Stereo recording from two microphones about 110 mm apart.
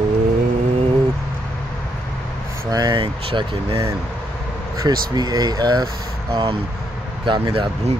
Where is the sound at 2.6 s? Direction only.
40° right (ahead or behind); by 3.9 s 55° right (ahead or behind).